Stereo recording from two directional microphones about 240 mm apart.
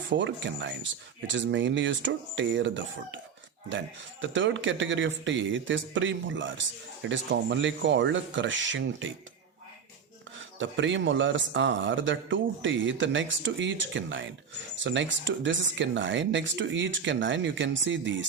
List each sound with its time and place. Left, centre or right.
0.1 s a man's voice: right
10.6 s a man's voice: right